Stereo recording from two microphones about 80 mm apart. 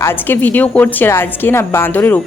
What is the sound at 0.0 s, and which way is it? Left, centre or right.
Speech, left.